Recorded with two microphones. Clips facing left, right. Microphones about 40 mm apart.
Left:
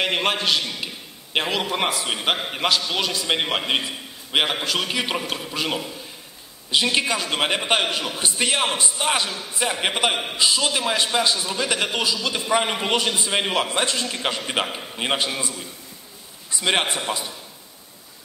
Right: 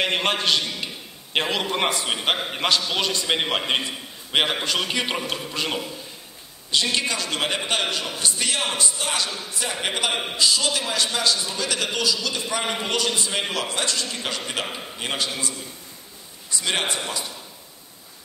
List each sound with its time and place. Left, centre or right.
0.0 s a man's voice: centre
6.7 s a man's voice: centre